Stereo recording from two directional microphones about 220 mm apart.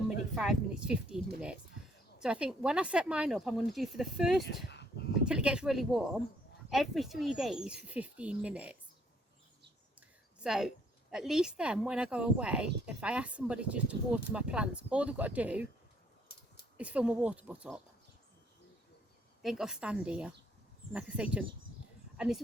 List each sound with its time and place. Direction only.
0.3 s speech: 5° right (ahead or behind)
2.2 s speech: 5° right (ahead or behind)
4.4 s a sound: 50° left (ahead or behind)
5.2 s speech: 5° right (ahead or behind)
10.4 s speech: centre (ahead or behind)
16.7 s speech: 5° right (ahead or behind)
19.4 s speech: centre (ahead or behind)